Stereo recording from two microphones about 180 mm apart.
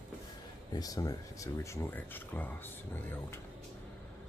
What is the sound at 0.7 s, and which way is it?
Speech, 20° left (ahead or behind).